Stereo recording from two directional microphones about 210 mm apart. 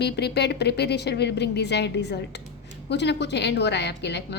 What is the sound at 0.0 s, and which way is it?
A woman's voice, 50° left (ahead or behind).